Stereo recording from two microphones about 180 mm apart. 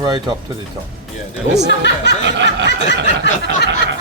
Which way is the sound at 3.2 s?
75° left (ahead or behind).